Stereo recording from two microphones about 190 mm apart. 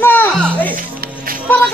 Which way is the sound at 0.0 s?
10° left (ahead or behind).